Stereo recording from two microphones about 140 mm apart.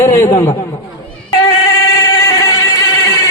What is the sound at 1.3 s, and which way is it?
Music, 25° left (ahead or behind).